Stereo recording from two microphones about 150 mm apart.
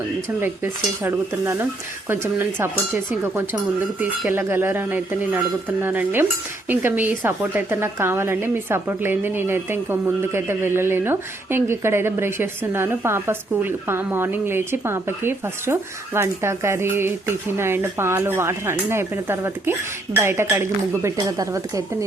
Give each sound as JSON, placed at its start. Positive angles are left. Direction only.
{"t": 0.3, "sound": "a woman's voice", "side_deg": -15}